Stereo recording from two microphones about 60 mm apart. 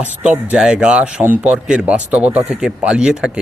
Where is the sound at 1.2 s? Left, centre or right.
Right.